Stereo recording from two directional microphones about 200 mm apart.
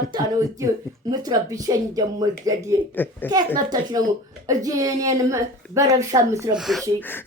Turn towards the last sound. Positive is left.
turn(degrees=10)  # may be behind; listen again after turning